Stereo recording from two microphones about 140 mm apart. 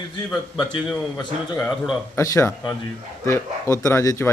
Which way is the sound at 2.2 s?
20° left (ahead or behind).